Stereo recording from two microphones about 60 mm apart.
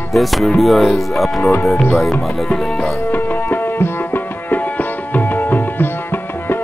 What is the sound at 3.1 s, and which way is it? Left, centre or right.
Music, left.